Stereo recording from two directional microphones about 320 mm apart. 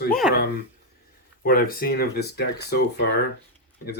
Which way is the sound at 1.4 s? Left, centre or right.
Left.